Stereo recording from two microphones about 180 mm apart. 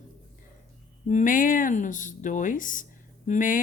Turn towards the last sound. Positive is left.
turn(degrees=45)  # may be behind; listen again after turning